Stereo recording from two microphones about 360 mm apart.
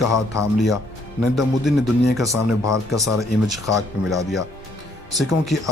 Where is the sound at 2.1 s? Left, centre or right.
Centre.